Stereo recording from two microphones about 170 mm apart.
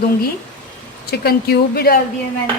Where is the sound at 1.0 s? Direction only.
70° left (ahead or behind).